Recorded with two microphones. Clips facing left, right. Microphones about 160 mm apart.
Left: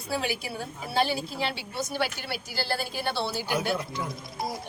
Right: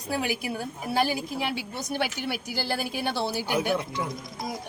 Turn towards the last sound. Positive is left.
turn(degrees=-15)  # may be behind; listen again after turning